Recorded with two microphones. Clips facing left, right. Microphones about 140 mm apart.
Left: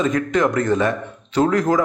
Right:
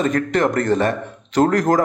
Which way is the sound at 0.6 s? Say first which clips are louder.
Right 1 dB; 35° right (ahead or behind).